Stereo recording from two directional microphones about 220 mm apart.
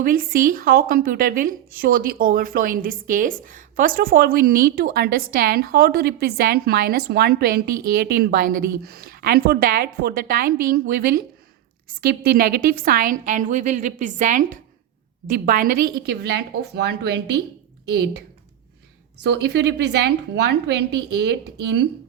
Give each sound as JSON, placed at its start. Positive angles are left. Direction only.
{"t": 0.0, "sound": "a woman's voice", "side_deg": -40}
{"t": 19.2, "sound": "speech", "side_deg": -50}